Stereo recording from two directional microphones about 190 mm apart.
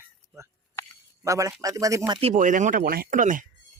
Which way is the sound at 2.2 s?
40° right (ahead or behind).